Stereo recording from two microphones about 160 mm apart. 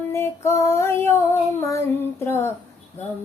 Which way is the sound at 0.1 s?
15° left (ahead or behind).